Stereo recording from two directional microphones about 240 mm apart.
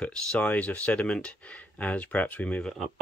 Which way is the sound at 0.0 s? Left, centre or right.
Centre.